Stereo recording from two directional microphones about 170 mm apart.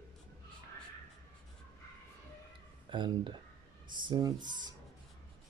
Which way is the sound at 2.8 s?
25° right (ahead or behind).